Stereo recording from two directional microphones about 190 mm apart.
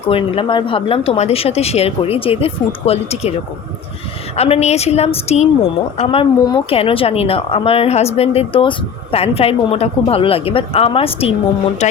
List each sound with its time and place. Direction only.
0.1 s speech: 30° left (ahead or behind)
4.4 s speech: 30° left (ahead or behind)